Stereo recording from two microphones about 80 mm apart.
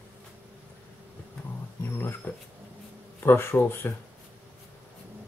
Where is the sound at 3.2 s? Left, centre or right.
Left.